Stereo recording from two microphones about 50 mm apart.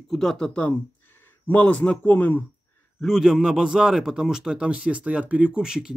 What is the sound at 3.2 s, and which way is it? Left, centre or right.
A man's voice, centre.